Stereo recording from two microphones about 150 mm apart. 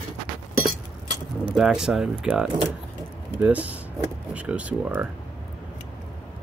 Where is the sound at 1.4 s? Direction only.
5° right (ahead or behind).